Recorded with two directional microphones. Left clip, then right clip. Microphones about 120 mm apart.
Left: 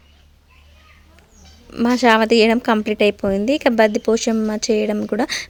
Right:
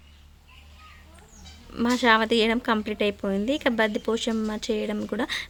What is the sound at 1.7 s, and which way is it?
Speech, 40° left (ahead or behind).